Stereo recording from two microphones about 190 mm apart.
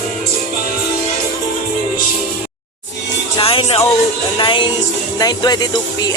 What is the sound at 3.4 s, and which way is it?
Speech, 30° left (ahead or behind).